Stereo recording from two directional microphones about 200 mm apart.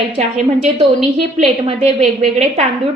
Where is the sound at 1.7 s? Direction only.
35° right (ahead or behind).